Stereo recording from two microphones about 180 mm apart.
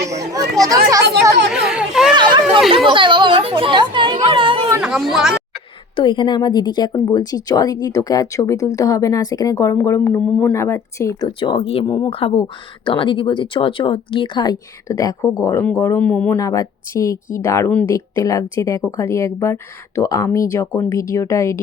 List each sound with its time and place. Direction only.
0.1 s children playing: 20° right (ahead or behind)
1.6 s a sound: 5° right (ahead or behind)
2.1 s a sound: 25° right (ahead or behind)
2.7 s speech: 30° right (ahead or behind)
4.2 s chatter: 30° right (ahead or behind)
4.8 s speech: 5° right (ahead or behind)
6.0 s a woman's voice: 25° left (ahead or behind)
11.3 s a woman's voice: 30° left (ahead or behind); by 16.4 s 5° left (ahead or behind)
16.4 s a woman's voice: 20° left (ahead or behind)